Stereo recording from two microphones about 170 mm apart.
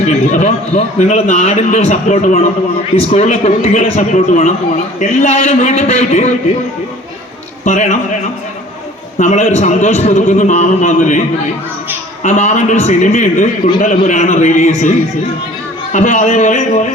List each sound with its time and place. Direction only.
0.0 s a man's voice: 45° left (ahead or behind)
7.6 s a man's voice: 45° left (ahead or behind)
9.1 s a man's voice: 45° left (ahead or behind)
12.2 s a man's voice: 40° left (ahead or behind)